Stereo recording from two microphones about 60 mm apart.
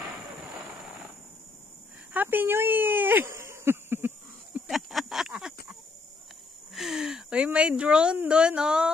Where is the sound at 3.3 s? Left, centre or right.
Right.